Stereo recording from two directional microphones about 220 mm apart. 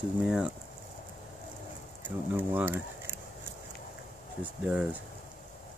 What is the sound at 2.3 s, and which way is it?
Speech, 10° right (ahead or behind).